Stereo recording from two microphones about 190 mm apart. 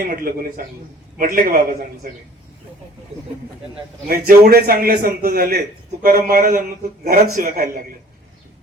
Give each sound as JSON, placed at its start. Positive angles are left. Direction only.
{"t": 0.1, "sound": "a man's voice", "side_deg": -50}
{"t": 4.1, "sound": "a man's voice", "side_deg": -50}